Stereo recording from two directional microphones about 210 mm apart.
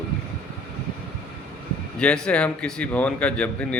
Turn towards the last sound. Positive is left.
turn(degrees=5)  # may be behind; listen again after turning